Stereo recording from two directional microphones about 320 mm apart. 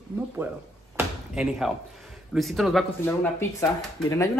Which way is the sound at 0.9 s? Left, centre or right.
Centre.